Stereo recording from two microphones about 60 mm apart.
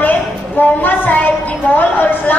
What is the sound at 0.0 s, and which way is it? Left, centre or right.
A woman's voice, left.